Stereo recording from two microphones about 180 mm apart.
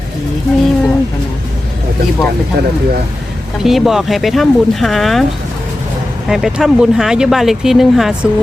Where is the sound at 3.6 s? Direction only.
Centre (ahead or behind).